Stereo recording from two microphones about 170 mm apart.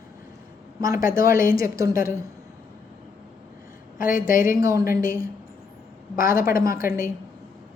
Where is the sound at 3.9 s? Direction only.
55° left (ahead or behind).